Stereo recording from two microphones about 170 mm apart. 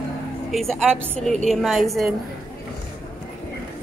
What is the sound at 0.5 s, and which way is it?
A woman's voice, centre (ahead or behind).